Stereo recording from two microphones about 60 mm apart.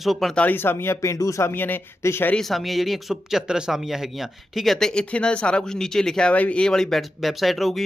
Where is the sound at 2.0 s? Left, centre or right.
Left.